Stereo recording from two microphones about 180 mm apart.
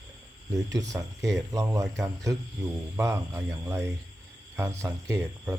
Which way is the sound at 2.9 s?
15° right (ahead or behind).